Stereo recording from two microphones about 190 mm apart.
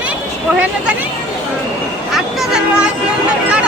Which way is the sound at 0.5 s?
5° right (ahead or behind).